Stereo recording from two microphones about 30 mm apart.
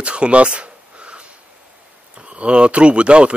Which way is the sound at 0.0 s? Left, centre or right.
Right.